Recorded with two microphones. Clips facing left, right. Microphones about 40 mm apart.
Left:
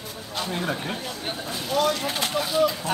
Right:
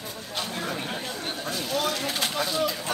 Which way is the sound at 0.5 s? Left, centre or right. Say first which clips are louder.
Left 5 dB; centre.